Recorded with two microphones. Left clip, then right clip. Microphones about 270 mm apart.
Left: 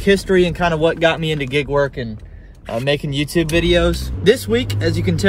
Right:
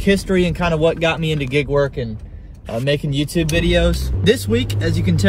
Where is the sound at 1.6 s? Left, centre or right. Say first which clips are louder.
Even; centre.